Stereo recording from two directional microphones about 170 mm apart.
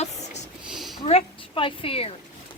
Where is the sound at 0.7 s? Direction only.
Centre (ahead or behind).